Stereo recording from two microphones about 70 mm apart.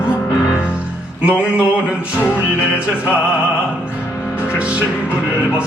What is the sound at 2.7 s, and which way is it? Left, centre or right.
Music, right.